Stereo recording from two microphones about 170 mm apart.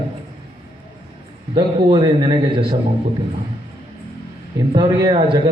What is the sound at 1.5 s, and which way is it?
Speech, 30° right (ahead or behind).